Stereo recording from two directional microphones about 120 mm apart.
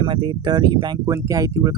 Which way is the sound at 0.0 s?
45° right (ahead or behind).